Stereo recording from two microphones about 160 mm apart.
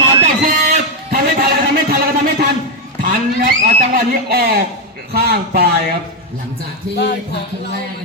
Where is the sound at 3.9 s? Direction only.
70° right (ahead or behind).